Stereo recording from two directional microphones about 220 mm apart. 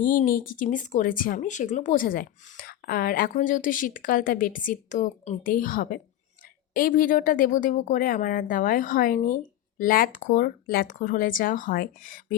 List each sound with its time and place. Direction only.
0.0 s a woman's voice: 40° left (ahead or behind)